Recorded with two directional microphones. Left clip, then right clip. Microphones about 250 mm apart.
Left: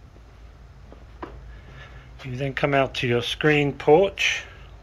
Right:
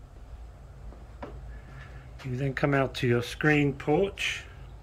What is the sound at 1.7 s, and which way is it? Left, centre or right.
Speech, centre.